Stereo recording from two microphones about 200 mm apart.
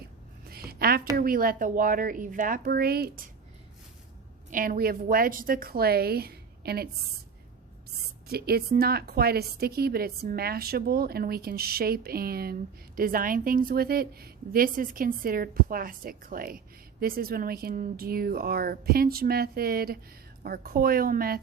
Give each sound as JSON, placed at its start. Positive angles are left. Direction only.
{"t": 0.4, "sound": "a sound", "side_deg": -50}
{"t": 1.1, "sound": "a woman's voice", "side_deg": -45}
{"t": 4.5, "sound": "a woman's voice", "side_deg": -45}
{"t": 7.9, "sound": "a woman's voice", "side_deg": -50}